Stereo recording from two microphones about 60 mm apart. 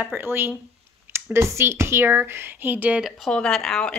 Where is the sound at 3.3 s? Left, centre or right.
Centre.